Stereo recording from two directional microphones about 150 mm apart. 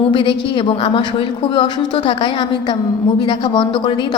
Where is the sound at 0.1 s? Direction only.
35° left (ahead or behind).